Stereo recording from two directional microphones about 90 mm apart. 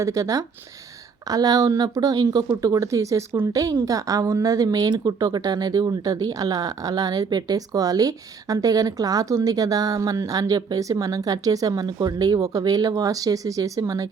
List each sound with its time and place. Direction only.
0.0 s a woman's voice: 35° right (ahead or behind)